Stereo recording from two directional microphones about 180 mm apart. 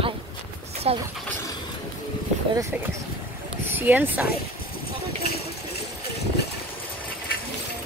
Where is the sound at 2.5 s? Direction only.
15° right (ahead or behind).